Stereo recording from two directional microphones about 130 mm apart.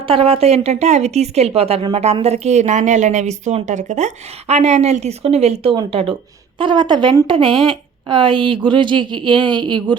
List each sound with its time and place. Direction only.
0.0 s speech: 45° right (ahead or behind)